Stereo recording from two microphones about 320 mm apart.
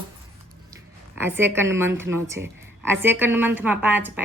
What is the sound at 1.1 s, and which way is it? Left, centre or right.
A woman's voice, centre.